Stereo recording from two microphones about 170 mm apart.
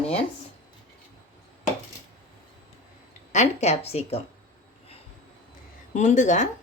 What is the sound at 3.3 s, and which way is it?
Speech, 40° left (ahead or behind).